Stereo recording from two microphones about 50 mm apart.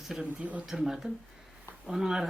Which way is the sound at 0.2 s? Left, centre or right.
Right.